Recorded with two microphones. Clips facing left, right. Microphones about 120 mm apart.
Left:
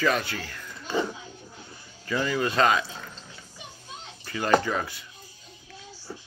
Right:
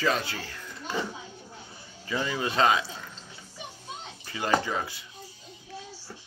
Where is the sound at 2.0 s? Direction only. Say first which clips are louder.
Left 3 dB; 20° right (ahead or behind).